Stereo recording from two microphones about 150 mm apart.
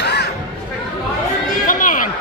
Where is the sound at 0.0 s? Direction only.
90° left.